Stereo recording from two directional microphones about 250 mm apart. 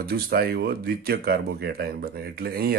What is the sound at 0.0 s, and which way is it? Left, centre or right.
Speech, right.